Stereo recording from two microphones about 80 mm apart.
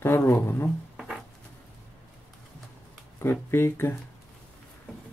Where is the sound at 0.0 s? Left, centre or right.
Left.